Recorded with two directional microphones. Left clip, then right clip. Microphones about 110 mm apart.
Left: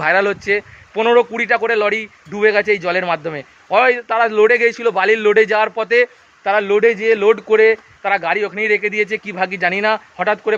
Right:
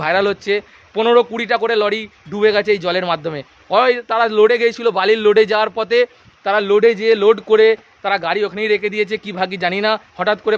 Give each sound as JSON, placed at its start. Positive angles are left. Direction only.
{"t": 0.0, "sound": "a man's voice", "side_deg": -15}
{"t": 10.2, "sound": "a man's voice", "side_deg": -30}